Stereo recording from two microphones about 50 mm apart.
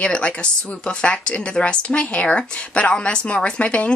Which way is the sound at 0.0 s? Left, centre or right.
Left.